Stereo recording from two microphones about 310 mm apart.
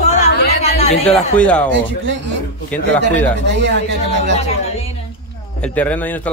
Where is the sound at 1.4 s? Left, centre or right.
Centre.